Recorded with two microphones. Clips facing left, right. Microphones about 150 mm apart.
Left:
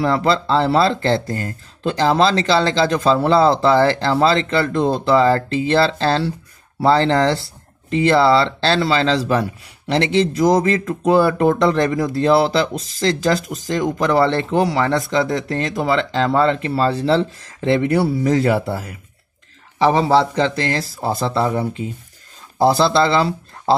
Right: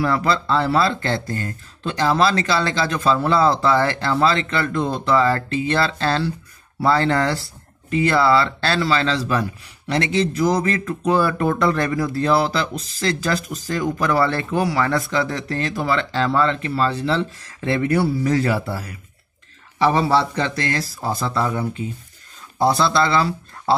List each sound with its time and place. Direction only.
0.0 s speech: 25° left (ahead or behind)